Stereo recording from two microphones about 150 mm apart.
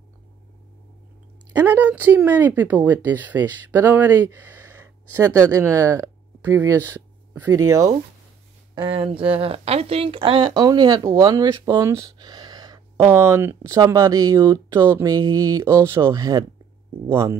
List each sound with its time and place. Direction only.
1.5 s speech: 15° right (ahead or behind)
8.7 s speech: 35° right (ahead or behind); by 17.4 s 15° right (ahead or behind)